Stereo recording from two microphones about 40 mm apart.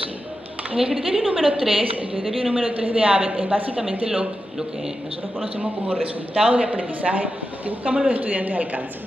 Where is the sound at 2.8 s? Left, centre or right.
Right.